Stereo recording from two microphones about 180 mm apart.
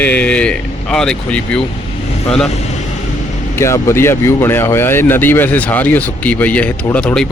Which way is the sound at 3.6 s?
15° left (ahead or behind).